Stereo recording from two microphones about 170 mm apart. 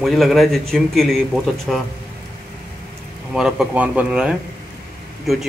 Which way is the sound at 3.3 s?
5° right (ahead or behind).